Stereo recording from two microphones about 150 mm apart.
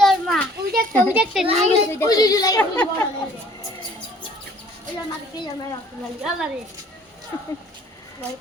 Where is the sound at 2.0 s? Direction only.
25° left (ahead or behind).